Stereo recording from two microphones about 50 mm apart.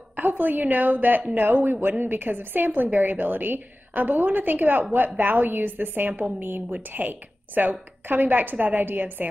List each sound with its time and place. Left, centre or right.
0.1 s a woman's voice: right